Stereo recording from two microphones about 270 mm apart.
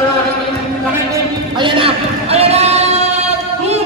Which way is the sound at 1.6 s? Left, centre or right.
Centre.